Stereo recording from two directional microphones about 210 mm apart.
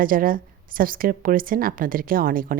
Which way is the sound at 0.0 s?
40° right (ahead or behind).